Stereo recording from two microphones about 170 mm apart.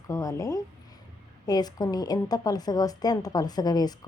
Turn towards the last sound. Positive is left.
turn(degrees=25)  # may be behind; listen again after turning